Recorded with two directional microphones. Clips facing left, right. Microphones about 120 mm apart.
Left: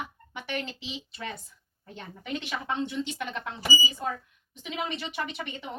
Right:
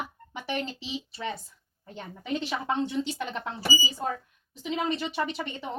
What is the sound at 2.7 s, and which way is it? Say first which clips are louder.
Speech: right 2 dB; 35° right (ahead or behind).